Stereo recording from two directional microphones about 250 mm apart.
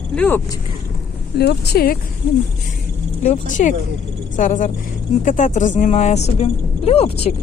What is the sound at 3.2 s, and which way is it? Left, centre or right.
Speech, left.